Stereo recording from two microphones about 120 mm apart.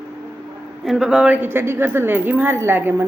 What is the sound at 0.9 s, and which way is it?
A woman's voice, 5° right (ahead or behind).